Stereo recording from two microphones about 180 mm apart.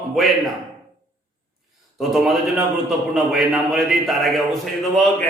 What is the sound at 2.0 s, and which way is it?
A man's voice, centre (ahead or behind).